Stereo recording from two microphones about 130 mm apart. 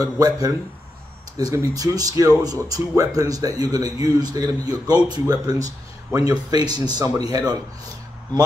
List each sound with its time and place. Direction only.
0.0 s speech: 30° right (ahead or behind)